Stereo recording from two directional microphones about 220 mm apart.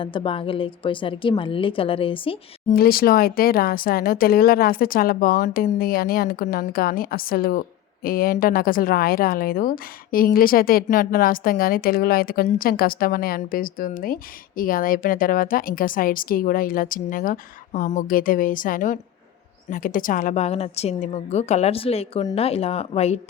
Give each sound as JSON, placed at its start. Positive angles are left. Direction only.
{"t": 0.0, "sound": "a woman's voice", "side_deg": 25}
{"t": 2.7, "sound": "a woman's voice", "side_deg": 45}